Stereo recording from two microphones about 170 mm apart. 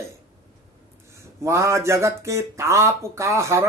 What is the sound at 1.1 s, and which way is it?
Speech, 15° right (ahead or behind).